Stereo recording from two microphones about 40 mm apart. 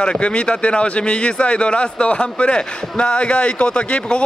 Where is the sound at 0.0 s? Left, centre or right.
Left.